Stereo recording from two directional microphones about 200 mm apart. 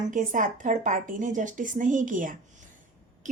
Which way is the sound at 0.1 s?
40° right (ahead or behind).